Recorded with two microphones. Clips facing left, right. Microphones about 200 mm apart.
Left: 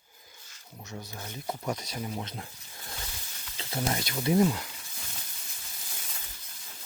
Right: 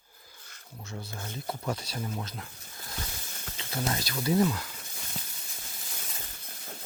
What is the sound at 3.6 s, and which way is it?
Speech, 25° left (ahead or behind).